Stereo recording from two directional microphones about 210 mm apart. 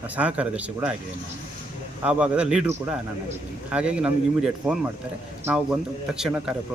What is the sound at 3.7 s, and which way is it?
Speech, 5° right (ahead or behind).